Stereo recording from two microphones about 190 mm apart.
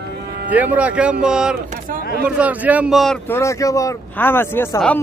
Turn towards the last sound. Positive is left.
turn(degrees=10)  # may be behind; listen again after turning